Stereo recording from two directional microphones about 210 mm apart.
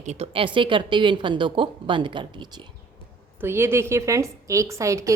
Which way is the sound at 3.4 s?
10° right (ahead or behind).